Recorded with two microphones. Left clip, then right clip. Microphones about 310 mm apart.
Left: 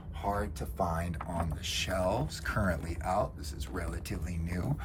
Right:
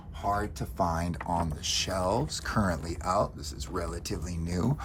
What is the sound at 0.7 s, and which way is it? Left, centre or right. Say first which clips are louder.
Speech: right 4 dB; centre.